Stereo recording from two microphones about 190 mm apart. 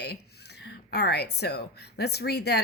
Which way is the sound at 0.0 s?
60° left (ahead or behind).